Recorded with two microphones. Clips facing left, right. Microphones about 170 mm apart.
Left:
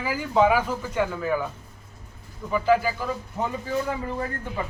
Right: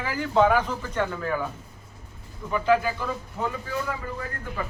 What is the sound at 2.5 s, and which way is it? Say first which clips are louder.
Speech: left 1 dB; 5° left (ahead or behind).